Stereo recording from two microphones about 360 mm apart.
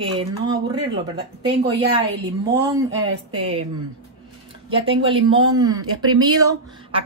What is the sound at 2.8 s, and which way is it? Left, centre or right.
Speech, right.